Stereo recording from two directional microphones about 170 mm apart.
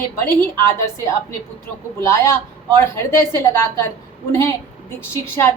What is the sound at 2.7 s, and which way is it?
A woman's voice, 15° left (ahead or behind).